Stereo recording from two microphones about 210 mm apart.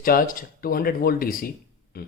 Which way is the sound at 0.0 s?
45° left (ahead or behind).